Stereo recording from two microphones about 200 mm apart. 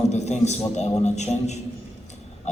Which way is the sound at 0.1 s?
35° left (ahead or behind).